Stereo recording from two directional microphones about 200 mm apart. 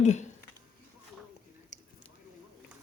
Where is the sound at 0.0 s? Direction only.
35° left (ahead or behind).